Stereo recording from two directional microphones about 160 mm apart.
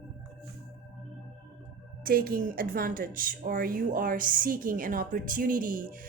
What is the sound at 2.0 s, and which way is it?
A woman's voice, 65° right (ahead or behind).